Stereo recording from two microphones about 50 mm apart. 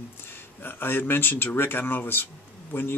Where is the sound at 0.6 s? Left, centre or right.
Left.